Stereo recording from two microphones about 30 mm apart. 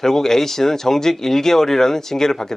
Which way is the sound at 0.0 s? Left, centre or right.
Centre.